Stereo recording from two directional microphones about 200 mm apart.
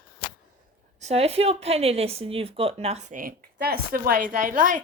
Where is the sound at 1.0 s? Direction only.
30° right (ahead or behind).